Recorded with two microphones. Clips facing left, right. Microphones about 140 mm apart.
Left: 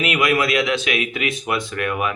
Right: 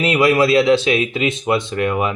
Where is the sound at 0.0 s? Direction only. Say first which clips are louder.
Right 5 dB; 30° right (ahead or behind).